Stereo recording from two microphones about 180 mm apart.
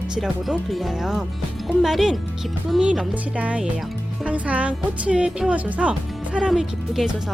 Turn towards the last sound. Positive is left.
turn(degrees=-5)  # may be behind; listen again after turning